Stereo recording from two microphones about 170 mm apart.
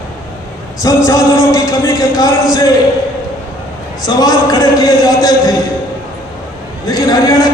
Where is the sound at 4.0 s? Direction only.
20° left (ahead or behind).